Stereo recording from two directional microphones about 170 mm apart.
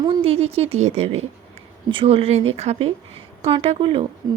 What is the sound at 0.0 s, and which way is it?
A woman's voice, 30° right (ahead or behind).